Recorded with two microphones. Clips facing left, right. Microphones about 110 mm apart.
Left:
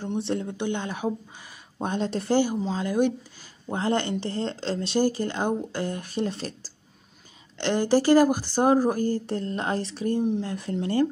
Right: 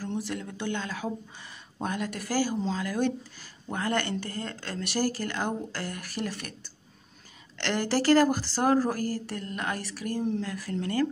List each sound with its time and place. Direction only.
0.0 s speech: 25° left (ahead or behind)
7.5 s speech: 20° left (ahead or behind)